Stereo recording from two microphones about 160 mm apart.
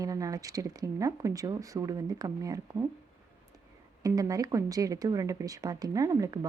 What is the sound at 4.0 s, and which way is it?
Speech, 20° right (ahead or behind).